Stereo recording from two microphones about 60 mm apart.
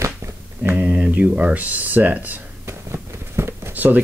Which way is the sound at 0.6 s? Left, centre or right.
Right.